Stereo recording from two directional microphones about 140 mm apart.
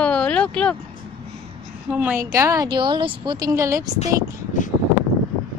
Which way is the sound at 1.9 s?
10° right (ahead or behind).